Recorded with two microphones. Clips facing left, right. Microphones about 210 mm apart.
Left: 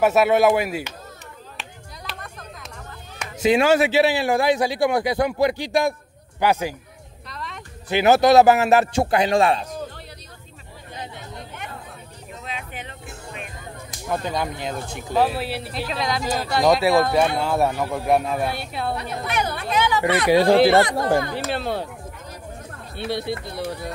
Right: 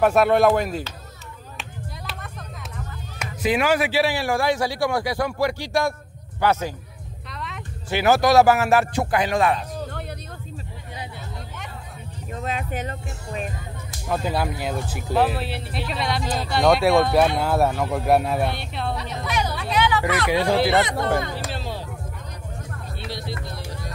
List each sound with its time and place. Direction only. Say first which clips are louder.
0.0 s speech: even; 5° left (ahead or behind)
2.1 s vehicle: left 4 dB; 5° right (ahead or behind)
3.4 s a man's voice: left 4 dB; 25° left (ahead or behind)
7.2 s a sound: even; centre (ahead or behind)
7.9 s a man's voice: left 3 dB; 20° left (ahead or behind)
12.4 s music: right 7 dB; 45° right (ahead or behind)
14.0 s speech: right 1 dB; 5° right (ahead or behind)
18.9 s a sound: left 1 dB; 55° left (ahead or behind)
20.2 s speech: left 7 dB; 35° left (ahead or behind)
21.5 s speech: left 6 dB; 60° left (ahead or behind)
22.9 s speech: left 8 dB; 60° left (ahead or behind)